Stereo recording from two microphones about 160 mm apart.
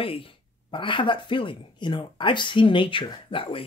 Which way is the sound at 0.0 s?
35° left (ahead or behind).